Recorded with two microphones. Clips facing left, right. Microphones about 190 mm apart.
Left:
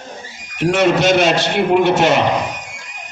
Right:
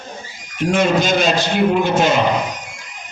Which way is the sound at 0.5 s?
75° left (ahead or behind).